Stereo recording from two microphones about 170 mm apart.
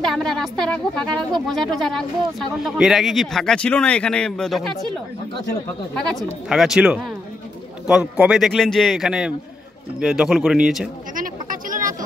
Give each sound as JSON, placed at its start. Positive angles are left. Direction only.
{"t": 0.0, "sound": "speech", "side_deg": 0}
{"t": 5.9, "sound": "speech", "side_deg": 5}
{"t": 11.1, "sound": "a sound", "side_deg": -55}